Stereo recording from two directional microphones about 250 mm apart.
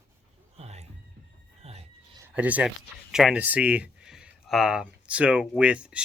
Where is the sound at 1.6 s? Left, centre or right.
Right.